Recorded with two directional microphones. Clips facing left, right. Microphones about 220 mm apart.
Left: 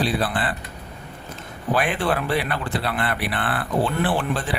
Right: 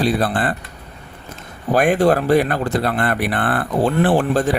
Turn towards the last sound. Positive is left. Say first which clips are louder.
# right 8 dB
turn(degrees=-45)  # may be behind; listen again after turning